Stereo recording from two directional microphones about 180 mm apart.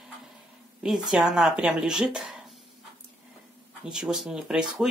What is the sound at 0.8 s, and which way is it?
Speech, 5° right (ahead or behind).